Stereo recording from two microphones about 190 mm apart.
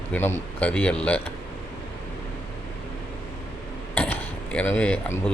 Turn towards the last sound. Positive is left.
turn(degrees=5)  # may be behind; listen again after turning